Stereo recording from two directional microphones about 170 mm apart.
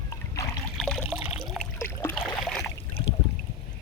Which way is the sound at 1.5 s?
10° left (ahead or behind).